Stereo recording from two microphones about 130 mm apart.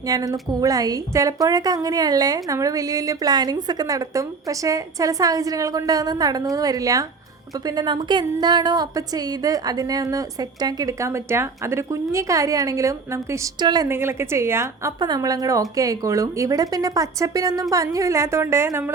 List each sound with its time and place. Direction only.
0.1 s a woman's voice: 30° right (ahead or behind)
7.8 s a woman's voice: 35° right (ahead or behind)
13.8 s a woman's voice: 20° right (ahead or behind)
15.0 s a woman's voice: 30° right (ahead or behind)